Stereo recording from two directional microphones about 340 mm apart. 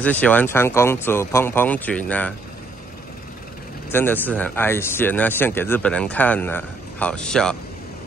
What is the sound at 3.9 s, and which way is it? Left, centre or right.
Speech, centre.